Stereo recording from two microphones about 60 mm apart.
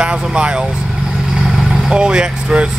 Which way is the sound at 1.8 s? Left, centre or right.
Centre.